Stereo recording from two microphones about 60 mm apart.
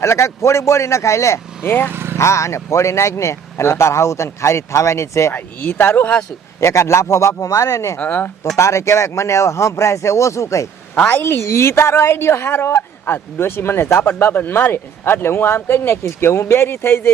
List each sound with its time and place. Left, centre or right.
0.0 s speech: left
1.9 s vehicle: right
2.1 s speech: left
5.3 s speech: left
6.6 s speech: left
7.9 s speech: left
8.5 s speech: left
10.9 s a woman's voice: left
11.2 s speech: left